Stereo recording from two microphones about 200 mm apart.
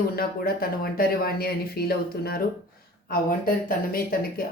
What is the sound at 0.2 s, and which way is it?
Speech, 50° left (ahead or behind).